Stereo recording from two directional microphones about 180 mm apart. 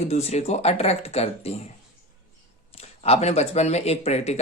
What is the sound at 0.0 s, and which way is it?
Speech, 35° left (ahead or behind).